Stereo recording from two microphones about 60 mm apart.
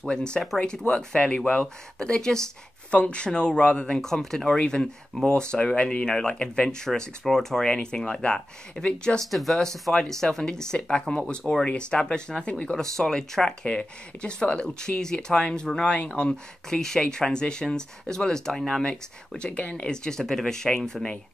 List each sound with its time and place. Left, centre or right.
0.0 s speech: centre
4.6 s speech: centre
9.2 s speech: centre